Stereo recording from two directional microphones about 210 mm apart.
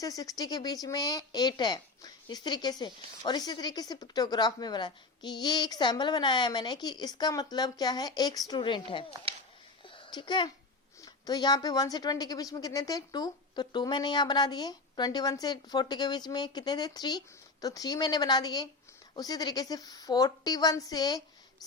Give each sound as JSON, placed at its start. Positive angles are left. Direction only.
{"t": 0.0, "sound": "a woman's voice", "side_deg": 15}
{"t": 9.8, "sound": "a sound", "side_deg": 20}
{"t": 11.0, "sound": "a woman's voice", "side_deg": 20}